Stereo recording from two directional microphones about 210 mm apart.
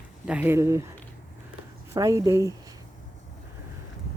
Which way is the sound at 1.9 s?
15° right (ahead or behind).